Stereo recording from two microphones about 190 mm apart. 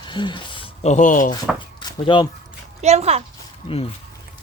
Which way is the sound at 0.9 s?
40° left (ahead or behind).